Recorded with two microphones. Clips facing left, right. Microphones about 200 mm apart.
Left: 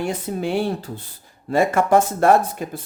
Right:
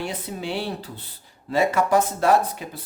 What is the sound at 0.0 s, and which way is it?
Speech, 50° left (ahead or behind).